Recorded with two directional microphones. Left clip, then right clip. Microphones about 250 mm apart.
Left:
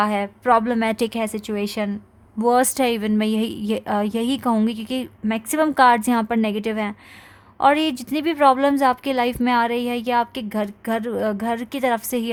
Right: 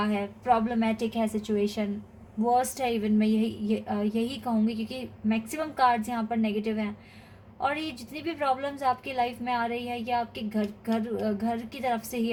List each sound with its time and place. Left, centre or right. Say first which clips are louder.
0.0 s a woman's voice: left 9 dB; left